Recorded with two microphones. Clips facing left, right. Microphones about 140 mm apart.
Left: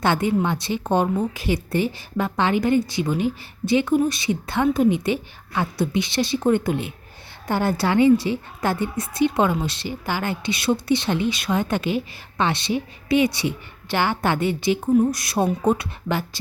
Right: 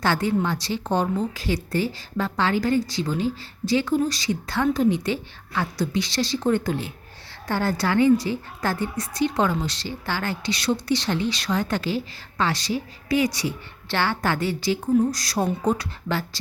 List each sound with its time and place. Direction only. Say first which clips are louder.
0.0 s a woman's voice: left 2 dB; 20° left (ahead or behind)